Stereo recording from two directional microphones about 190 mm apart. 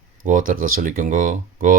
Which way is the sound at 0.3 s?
45° right (ahead or behind).